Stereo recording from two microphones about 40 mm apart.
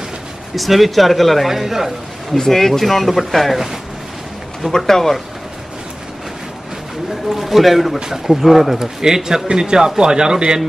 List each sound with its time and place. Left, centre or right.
0.6 s speech: centre
2.3 s speech: centre
4.7 s speech: centre
7.2 s speech: centre